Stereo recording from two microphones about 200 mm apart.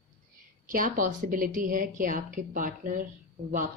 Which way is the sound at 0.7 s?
45° right (ahead or behind).